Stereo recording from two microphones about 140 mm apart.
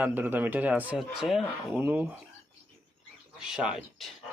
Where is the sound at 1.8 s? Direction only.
10° right (ahead or behind).